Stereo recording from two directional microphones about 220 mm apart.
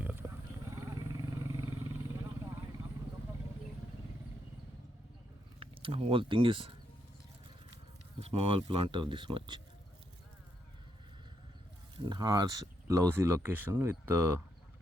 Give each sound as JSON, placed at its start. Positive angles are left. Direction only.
{"t": 0.0, "sound": "wild animals", "side_deg": -10}
{"t": 0.8, "sound": "vehicle", "side_deg": -15}
{"t": 5.5, "sound": "speech", "side_deg": -25}
{"t": 8.2, "sound": "speech", "side_deg": -25}
{"t": 11.9, "sound": "speech", "side_deg": -20}